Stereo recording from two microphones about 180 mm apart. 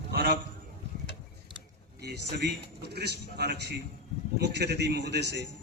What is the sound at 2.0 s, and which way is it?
A man's voice, 65° right (ahead or behind).